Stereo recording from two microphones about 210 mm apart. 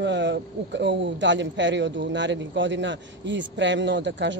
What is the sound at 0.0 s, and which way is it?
A man's voice, 55° right (ahead or behind).